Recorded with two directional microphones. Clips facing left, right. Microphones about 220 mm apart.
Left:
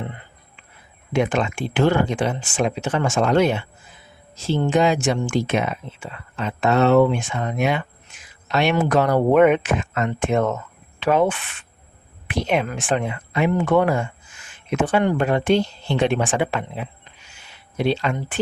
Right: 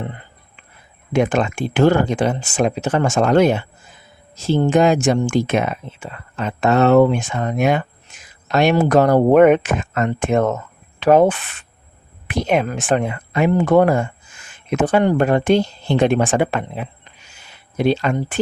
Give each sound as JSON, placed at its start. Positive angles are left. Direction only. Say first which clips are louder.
{"t": 1.1, "sound": "speech", "louder": "right 3 dB", "side_deg": -45}